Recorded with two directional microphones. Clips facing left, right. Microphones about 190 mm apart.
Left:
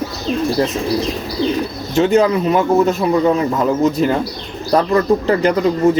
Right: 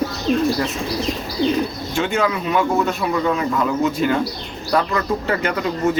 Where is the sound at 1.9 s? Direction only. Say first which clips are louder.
Left 8 dB; 35° left (ahead or behind).